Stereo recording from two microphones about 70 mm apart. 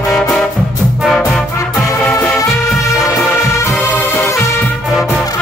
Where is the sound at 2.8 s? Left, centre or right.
Centre.